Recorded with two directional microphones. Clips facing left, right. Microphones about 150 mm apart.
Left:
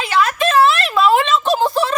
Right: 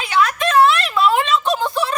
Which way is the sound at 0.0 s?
30° left (ahead or behind).